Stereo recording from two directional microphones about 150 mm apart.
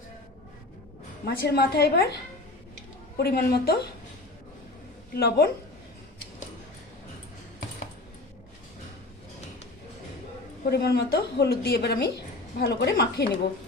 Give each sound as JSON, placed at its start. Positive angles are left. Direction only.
{"t": 1.2, "sound": "a woman's voice", "side_deg": 90}
{"t": 3.2, "sound": "a woman's voice", "side_deg": 90}
{"t": 5.1, "sound": "a woman's voice", "side_deg": 90}
{"t": 10.7, "sound": "a woman's voice", "side_deg": 90}